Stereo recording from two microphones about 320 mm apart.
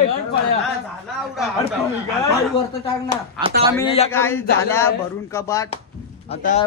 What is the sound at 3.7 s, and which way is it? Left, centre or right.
Speech, centre.